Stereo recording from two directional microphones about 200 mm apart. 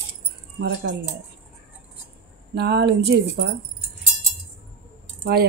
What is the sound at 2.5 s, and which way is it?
Speech, 55° right (ahead or behind).